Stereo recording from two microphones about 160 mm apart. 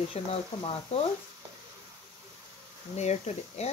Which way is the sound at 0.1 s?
40° left (ahead or behind).